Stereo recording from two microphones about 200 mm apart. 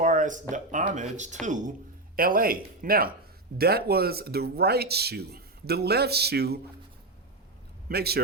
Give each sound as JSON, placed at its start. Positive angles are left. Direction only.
{"t": 0.0, "sound": "speech", "side_deg": -40}
{"t": 7.9, "sound": "speech", "side_deg": -50}